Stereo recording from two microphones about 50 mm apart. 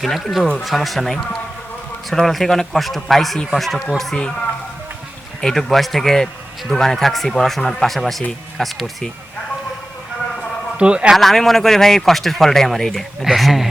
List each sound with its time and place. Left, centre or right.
0.0 s a man's voice: centre
5.4 s a man's voice: centre
10.8 s a man's voice: right
11.2 s a man's voice: centre
13.2 s a man's voice: centre